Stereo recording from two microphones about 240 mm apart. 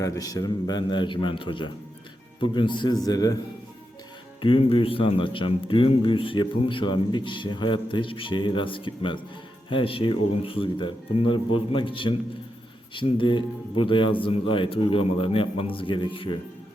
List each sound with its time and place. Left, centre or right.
0.0 s a man's voice: centre
4.4 s a man's voice: left